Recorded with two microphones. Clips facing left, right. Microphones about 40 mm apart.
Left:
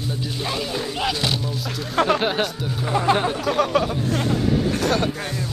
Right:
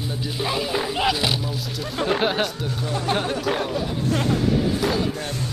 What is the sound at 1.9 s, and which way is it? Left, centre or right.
Speech, left.